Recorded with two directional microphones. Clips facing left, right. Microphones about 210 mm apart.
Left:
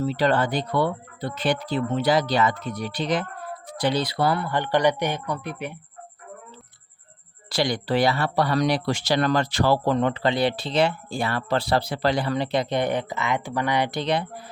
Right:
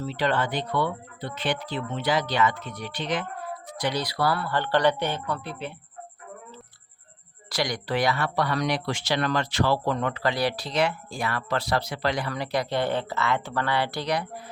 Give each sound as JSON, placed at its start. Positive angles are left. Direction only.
{"t": 0.0, "sound": "speech", "side_deg": 40}
{"t": 7.5, "sound": "speech", "side_deg": 30}